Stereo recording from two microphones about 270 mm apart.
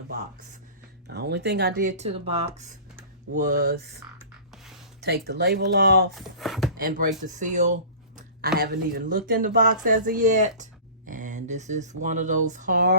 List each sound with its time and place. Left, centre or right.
1.0 s speech: right
4.2 s a sound: centre
4.9 s speech: right
6.1 s speech: centre
6.7 s speech: right